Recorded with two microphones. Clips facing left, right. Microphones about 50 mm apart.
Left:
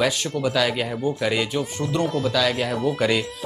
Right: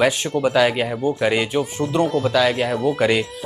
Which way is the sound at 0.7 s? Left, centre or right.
Centre.